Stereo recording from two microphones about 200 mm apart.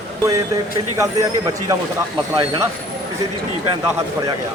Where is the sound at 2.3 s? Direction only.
15° right (ahead or behind).